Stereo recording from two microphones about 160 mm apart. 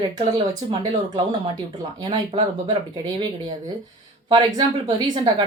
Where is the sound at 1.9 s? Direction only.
25° right (ahead or behind).